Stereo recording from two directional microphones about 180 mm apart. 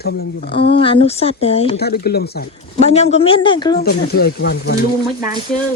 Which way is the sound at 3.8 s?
65° left (ahead or behind).